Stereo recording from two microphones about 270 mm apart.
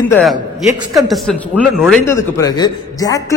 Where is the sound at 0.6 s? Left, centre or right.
Centre.